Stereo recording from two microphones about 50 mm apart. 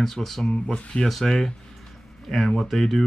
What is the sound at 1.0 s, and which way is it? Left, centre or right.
Speech, centre.